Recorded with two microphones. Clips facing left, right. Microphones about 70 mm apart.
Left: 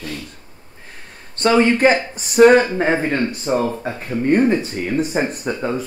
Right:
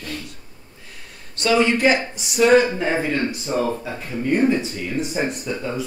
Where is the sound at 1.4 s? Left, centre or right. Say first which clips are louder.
Left 4 dB; left.